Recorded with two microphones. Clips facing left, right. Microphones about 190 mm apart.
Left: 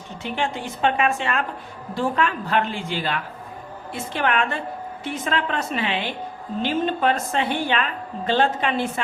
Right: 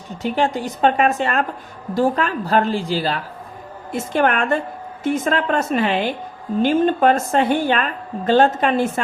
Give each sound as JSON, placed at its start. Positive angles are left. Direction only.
{"t": 0.2, "sound": "a woman's voice", "side_deg": -40}